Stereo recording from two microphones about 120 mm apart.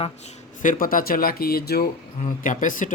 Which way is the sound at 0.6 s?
90° left.